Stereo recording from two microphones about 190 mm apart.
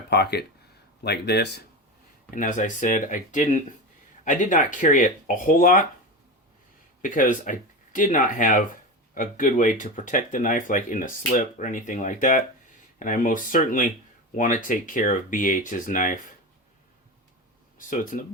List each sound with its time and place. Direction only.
0.1 s speech: 60° left (ahead or behind)
2.3 s speech: 40° left (ahead or behind)
7.0 s speech: 45° left (ahead or behind)
17.7 s speech: 45° left (ahead or behind)